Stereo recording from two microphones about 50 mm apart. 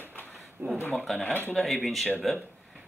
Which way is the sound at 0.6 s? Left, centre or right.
Right.